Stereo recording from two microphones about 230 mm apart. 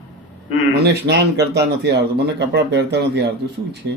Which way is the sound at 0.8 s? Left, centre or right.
Right.